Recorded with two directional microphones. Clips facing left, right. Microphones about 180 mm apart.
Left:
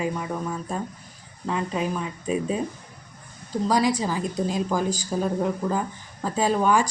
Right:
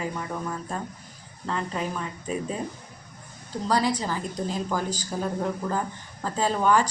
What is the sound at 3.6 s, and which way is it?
Speech, 10° left (ahead or behind).